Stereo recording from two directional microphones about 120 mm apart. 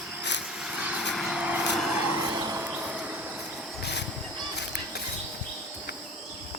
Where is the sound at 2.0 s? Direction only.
15° right (ahead or behind).